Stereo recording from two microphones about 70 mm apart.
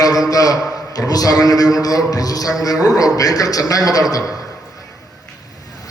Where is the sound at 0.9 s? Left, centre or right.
Left.